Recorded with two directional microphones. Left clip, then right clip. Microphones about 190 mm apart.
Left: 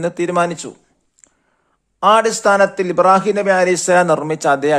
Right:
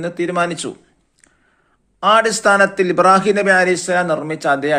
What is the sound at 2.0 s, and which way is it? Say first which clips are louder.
A man's voice: left 1 dB; 45° left (ahead or behind).